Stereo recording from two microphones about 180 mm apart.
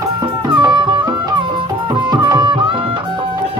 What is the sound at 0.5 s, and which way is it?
Music, 25° right (ahead or behind).